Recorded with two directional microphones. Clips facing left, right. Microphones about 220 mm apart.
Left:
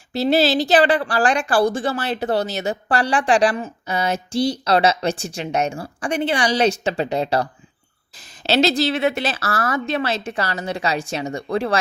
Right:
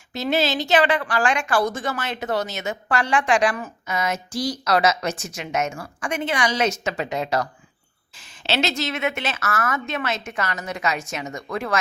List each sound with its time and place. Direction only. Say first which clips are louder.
0.1 s a woman's voice: left 5 dB; 35° left (ahead or behind)
8.4 s a woman's voice: left 7 dB; 35° left (ahead or behind)